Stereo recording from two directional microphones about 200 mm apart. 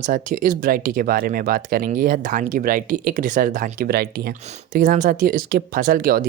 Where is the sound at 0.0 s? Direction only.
40° right (ahead or behind).